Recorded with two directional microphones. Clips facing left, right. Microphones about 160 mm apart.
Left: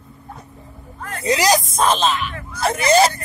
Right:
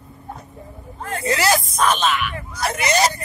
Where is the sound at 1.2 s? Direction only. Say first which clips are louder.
Left 3 dB; 15° left (ahead or behind).